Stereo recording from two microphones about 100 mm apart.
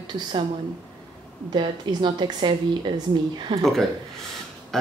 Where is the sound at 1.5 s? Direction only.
50° right (ahead or behind).